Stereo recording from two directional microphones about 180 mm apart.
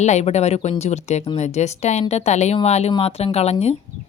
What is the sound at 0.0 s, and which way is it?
A woman's voice, 40° left (ahead or behind).